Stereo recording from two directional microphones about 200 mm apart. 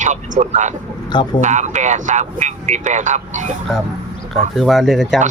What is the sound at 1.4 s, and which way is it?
Speech, 35° right (ahead or behind).